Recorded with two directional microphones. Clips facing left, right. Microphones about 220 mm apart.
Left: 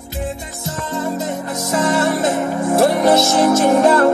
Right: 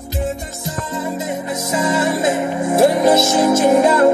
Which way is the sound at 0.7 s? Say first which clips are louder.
Left 2 dB; 5° right (ahead or behind).